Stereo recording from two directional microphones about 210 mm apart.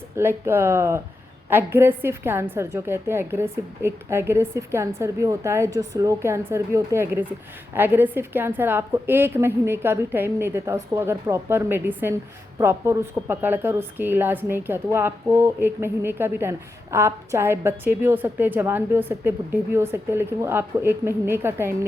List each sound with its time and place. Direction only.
0.2 s a woman's voice: 10° right (ahead or behind)